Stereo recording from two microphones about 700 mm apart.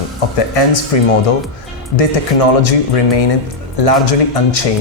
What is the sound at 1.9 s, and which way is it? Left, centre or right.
Speech, left.